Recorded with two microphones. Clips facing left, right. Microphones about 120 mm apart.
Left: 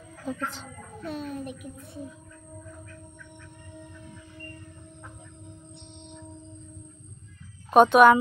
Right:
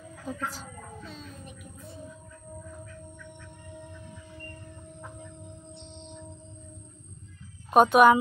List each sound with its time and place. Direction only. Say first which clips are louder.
0.2 s speech: left 2 dB; 5° right (ahead or behind)
1.0 s speech: left 10 dB; 60° left (ahead or behind)
7.7 s speech: left 2 dB; 5° right (ahead or behind)